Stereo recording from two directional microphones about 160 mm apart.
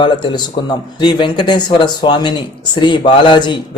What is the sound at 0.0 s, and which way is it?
A man's voice, 30° left (ahead or behind).